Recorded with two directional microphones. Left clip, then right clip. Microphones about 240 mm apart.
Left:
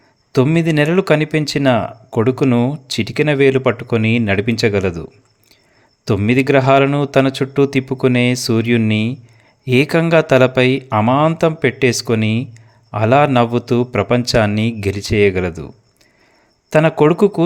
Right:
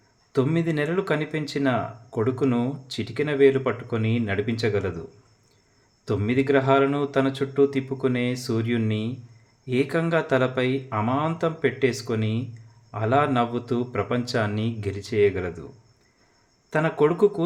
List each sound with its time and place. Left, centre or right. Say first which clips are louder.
0.3 s speech: left 9 dB; left
6.1 s speech: left 8 dB; left